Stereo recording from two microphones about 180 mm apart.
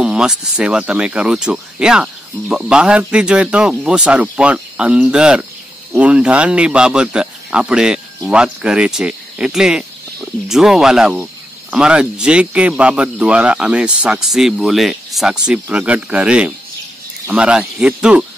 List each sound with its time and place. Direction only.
0.0 s speech: 5° right (ahead or behind)